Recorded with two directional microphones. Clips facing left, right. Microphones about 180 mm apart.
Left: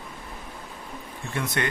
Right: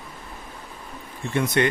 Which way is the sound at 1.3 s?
20° right (ahead or behind).